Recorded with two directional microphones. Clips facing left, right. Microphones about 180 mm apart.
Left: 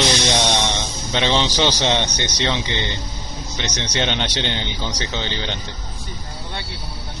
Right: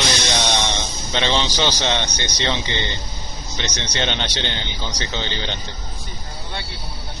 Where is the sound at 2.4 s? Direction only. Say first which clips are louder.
Even; 5° left (ahead or behind).